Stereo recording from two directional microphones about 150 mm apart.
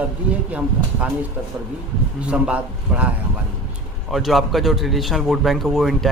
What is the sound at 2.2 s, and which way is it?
Speech, 10° right (ahead or behind).